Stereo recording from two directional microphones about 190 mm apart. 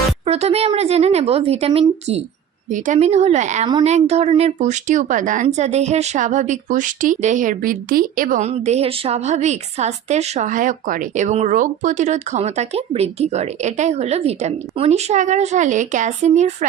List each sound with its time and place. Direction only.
0.3 s speech: 35° right (ahead or behind)